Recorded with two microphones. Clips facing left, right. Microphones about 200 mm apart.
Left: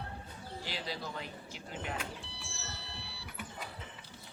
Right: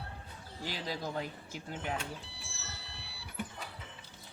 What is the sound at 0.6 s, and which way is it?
Speech, 45° right (ahead or behind).